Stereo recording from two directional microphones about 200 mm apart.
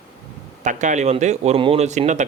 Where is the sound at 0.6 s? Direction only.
35° right (ahead or behind).